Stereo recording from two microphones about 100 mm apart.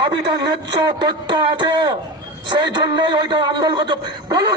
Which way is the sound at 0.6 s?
50° right (ahead or behind).